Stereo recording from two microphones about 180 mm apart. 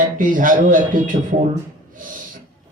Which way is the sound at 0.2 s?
50° right (ahead or behind).